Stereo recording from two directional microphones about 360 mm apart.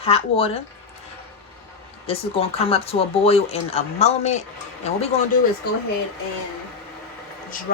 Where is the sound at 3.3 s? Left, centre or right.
Centre.